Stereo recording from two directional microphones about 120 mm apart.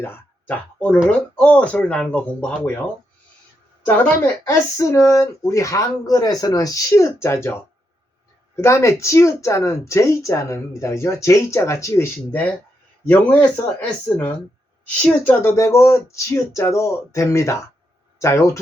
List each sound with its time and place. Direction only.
0.0 s speech: 15° left (ahead or behind)
3.8 s speech: 10° left (ahead or behind)
4.4 s speech: 25° left (ahead or behind)
13.1 s speech: 15° left (ahead or behind)